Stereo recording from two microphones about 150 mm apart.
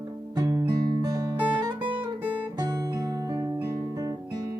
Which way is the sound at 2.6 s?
25° right (ahead or behind).